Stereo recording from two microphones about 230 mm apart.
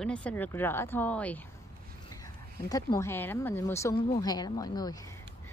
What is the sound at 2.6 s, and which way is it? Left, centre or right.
Speech, centre.